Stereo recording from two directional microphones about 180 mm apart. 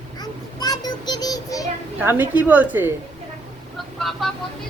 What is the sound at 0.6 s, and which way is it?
Child singing, 20° left (ahead or behind).